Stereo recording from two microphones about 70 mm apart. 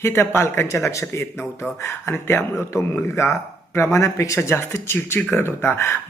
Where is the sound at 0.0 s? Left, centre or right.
Left.